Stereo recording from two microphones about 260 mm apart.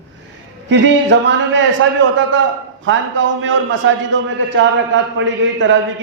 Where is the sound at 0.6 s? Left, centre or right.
Right.